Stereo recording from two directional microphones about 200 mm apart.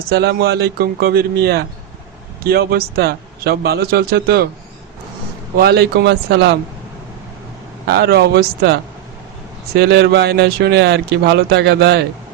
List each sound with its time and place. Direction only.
0.1 s a man's voice: 55° right (ahead or behind)
5.5 s speech: 50° right (ahead or behind)
7.9 s speech: 55° right (ahead or behind)